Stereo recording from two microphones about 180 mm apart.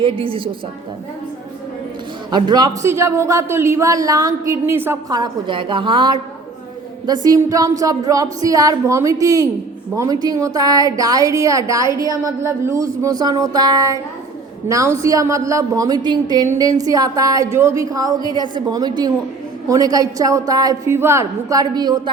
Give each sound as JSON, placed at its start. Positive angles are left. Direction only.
{"t": 0.0, "sound": "a woman's voice", "side_deg": -30}
{"t": 2.3, "sound": "a man's voice", "side_deg": -25}